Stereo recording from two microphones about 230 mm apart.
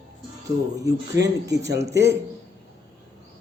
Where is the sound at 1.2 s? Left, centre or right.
Right.